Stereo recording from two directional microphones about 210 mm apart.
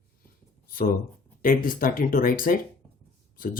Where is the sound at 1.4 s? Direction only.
45° left (ahead or behind).